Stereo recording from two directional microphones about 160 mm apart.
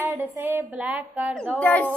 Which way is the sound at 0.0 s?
15° right (ahead or behind).